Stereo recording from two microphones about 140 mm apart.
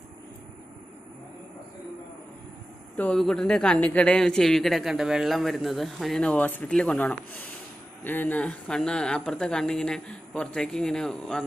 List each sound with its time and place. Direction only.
2.9 s a man's voice: 10° left (ahead or behind)